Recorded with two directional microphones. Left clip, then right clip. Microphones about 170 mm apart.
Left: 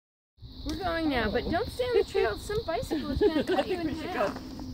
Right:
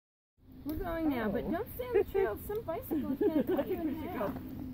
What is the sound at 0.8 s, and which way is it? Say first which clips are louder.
Speech: left 6 dB; 50° right (ahead or behind).